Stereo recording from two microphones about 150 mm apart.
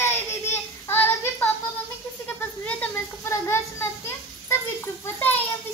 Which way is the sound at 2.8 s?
15° left (ahead or behind).